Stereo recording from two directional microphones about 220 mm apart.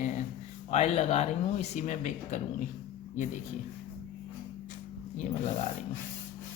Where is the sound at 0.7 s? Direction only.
30° left (ahead or behind).